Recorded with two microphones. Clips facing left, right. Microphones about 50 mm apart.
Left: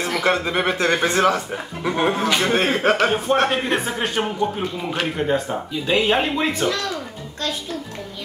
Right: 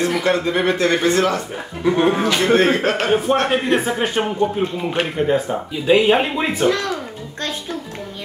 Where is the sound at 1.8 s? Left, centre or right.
Centre.